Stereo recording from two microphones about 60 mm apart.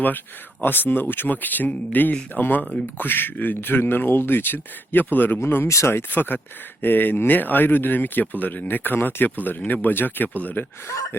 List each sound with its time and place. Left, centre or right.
0.6 s speech: left
5.6 s speech: left
5.9 s speech: left
11.1 s speech: left